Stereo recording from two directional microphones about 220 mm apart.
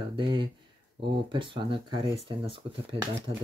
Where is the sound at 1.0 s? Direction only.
50° right (ahead or behind).